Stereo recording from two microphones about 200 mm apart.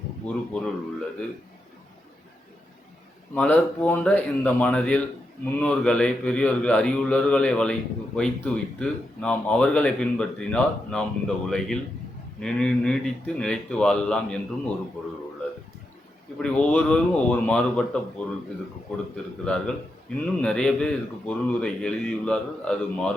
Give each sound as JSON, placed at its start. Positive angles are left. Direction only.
{"t": 0.3, "sound": "speech", "side_deg": 5}
{"t": 3.3, "sound": "a man's voice", "side_deg": 5}
{"t": 16.4, "sound": "a man's voice", "side_deg": 5}
{"t": 19.1, "sound": "speech", "side_deg": 5}